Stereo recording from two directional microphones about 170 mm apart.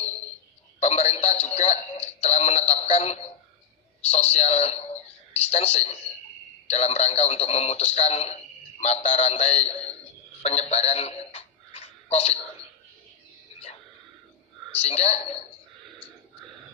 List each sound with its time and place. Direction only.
0.7 s a man's voice: 40° left (ahead or behind)
10.4 s telephone: 40° left (ahead or behind)
14.8 s a man's voice: 40° left (ahead or behind)